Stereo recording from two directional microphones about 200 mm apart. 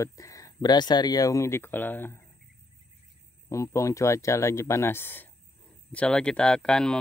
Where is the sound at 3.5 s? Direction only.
15° left (ahead or behind).